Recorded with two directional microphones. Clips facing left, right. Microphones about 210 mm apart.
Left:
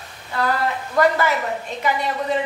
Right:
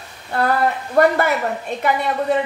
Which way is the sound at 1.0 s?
60° right (ahead or behind).